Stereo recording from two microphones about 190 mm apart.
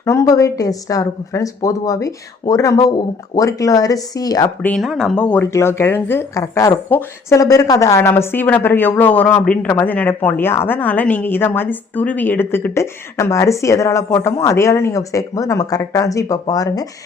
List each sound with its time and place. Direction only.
0.0 s a woman's voice: 15° left (ahead or behind)
4.7 s a woman's voice: centre (ahead or behind); by 16.8 s 20° left (ahead or behind)